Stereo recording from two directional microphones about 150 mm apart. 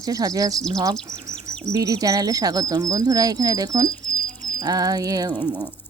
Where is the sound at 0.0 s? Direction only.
25° right (ahead or behind).